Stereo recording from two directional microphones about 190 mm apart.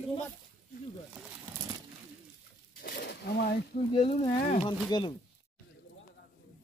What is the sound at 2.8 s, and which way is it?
Roaring cats, 60° left (ahead or behind).